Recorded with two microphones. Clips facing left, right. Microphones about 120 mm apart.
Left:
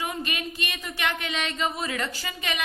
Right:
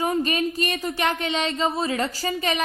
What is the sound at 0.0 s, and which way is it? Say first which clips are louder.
A woman's voice: right 8 dB; 35° right (ahead or behind).